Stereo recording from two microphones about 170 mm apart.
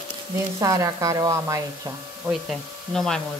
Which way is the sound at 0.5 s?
20° right (ahead or behind).